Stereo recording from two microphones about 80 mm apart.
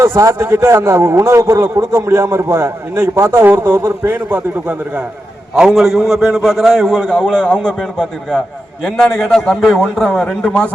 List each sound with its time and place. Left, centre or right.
0.0 s a man's voice: right; by 5.0 s centre
5.5 s a man's voice: centre